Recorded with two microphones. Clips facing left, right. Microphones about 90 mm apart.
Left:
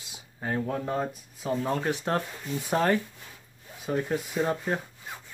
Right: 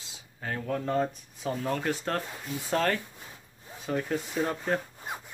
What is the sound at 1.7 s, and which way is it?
Speech, 20° left (ahead or behind).